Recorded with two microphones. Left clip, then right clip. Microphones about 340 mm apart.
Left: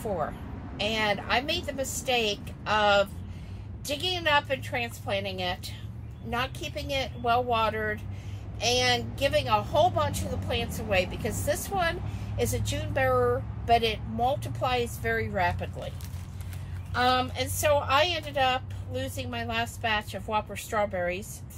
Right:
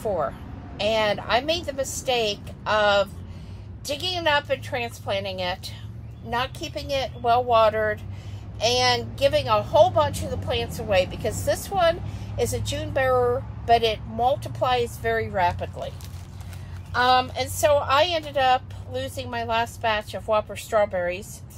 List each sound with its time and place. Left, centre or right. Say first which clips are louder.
0.7 s a woman's voice: right 5 dB; centre
16.9 s a woman's voice: right 5 dB; centre